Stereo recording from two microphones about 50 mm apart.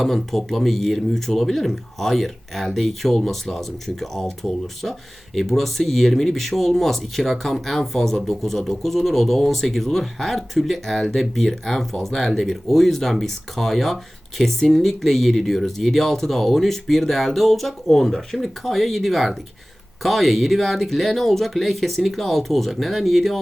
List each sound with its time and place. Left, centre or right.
0.0 s speech: centre